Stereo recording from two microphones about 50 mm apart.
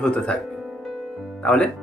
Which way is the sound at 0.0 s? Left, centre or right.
Left.